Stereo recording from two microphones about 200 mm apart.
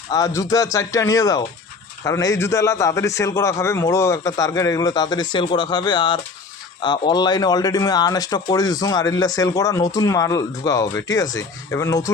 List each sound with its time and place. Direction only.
0.1 s speech: 15° left (ahead or behind)